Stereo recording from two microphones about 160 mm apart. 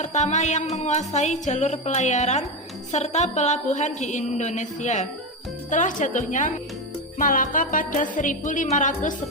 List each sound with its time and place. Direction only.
0.0 s music: 45° left (ahead or behind)